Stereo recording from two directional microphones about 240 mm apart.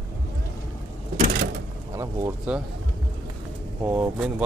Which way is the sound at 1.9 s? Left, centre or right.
Centre.